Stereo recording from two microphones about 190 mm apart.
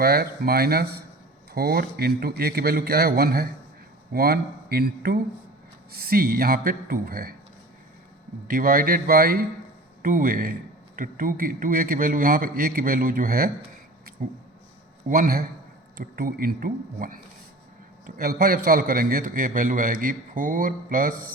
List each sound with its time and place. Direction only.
0.0 s a man's voice: 55° right (ahead or behind)
8.4 s a man's voice: 50° right (ahead or behind)
15.0 s a man's voice: 45° right (ahead or behind)